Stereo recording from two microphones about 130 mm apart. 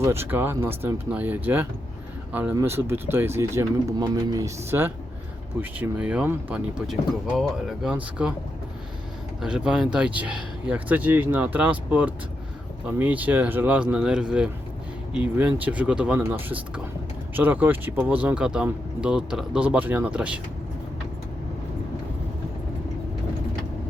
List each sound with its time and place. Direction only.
0.0 s speech: 20° right (ahead or behind); by 7.9 s 5° right (ahead or behind)
9.4 s speech: 5° right (ahead or behind)